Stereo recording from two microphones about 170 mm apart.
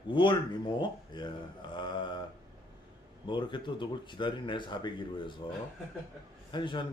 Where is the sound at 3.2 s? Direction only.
30° left (ahead or behind).